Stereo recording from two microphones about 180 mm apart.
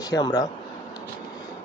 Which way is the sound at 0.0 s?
20° left (ahead or behind).